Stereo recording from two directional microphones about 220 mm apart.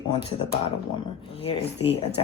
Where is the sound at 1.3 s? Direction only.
25° left (ahead or behind).